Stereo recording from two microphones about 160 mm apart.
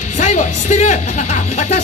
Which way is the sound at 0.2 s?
50° left (ahead or behind).